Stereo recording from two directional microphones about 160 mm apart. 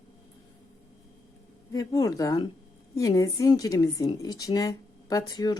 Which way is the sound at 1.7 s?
20° left (ahead or behind).